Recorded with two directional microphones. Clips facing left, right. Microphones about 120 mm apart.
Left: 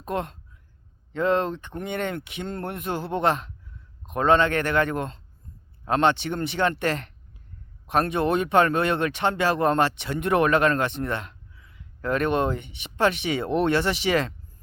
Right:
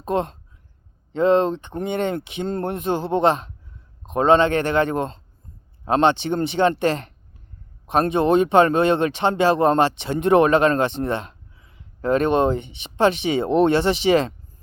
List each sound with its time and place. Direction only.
0.0 s speech: 25° right (ahead or behind)